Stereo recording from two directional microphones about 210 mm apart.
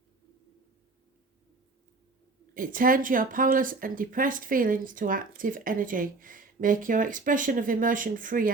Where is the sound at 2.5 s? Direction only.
40° right (ahead or behind).